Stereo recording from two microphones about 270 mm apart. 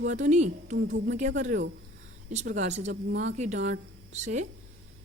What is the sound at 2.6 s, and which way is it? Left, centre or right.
A woman's voice, right.